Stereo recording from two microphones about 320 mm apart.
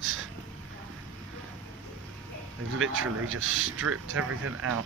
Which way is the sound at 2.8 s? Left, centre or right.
Right.